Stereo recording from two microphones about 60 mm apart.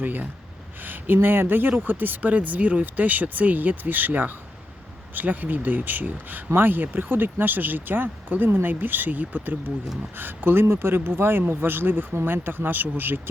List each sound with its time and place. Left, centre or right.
0.0 s speech: right